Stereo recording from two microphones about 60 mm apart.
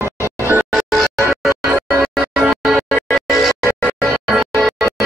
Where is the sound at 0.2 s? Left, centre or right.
Left.